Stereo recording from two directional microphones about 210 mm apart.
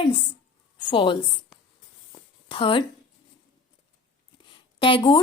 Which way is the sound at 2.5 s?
25° left (ahead or behind).